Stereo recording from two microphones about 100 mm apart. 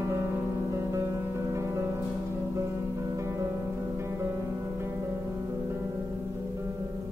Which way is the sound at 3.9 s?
25° right (ahead or behind).